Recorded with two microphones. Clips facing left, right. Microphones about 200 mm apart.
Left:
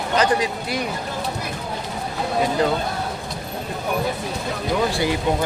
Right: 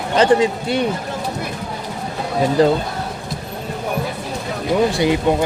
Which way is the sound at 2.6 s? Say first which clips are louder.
Right 8 dB; 35° right (ahead or behind).